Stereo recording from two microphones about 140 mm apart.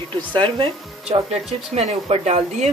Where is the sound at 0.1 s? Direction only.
40° right (ahead or behind).